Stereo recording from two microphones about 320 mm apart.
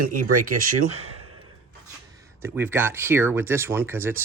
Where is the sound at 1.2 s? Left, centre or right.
Right.